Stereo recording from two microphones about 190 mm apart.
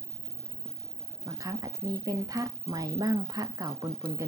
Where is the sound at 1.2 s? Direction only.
20° right (ahead or behind).